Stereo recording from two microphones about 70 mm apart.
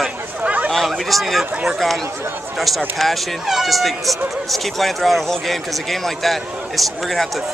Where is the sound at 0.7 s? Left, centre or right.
Centre.